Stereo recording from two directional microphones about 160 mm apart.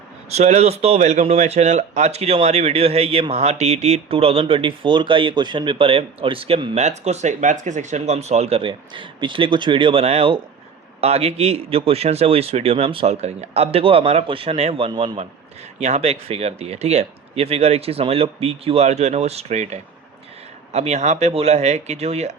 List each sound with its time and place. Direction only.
0.3 s speech: 45° right (ahead or behind)
6.7 s speech: 45° right (ahead or behind)